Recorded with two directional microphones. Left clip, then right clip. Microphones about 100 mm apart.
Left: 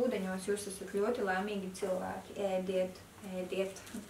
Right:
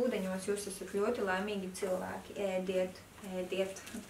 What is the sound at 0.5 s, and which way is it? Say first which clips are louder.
Speech: left 3 dB; 5° left (ahead or behind).